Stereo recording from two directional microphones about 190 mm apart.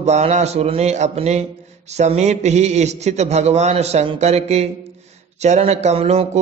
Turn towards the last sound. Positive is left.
turn(degrees=-30)  # may be behind; listen again after turning